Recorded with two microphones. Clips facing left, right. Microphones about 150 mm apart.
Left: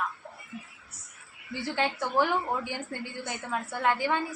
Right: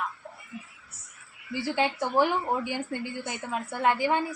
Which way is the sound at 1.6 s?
15° right (ahead or behind).